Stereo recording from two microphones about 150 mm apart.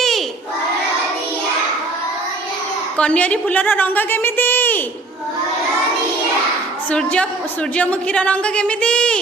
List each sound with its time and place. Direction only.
3.0 s a woman's voice: 10° left (ahead or behind)
6.9 s a woman's voice: 5° left (ahead or behind)